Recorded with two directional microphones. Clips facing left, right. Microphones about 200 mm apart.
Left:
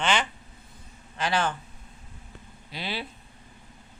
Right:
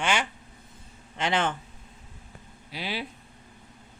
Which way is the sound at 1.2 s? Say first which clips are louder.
Even; 25° right (ahead or behind).